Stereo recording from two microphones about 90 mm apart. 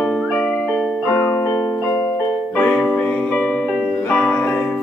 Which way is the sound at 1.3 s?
25° left (ahead or behind).